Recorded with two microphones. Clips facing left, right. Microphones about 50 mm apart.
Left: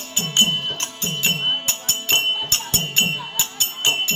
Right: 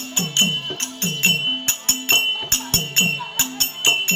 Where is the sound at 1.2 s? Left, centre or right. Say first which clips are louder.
Right 1 dB; right.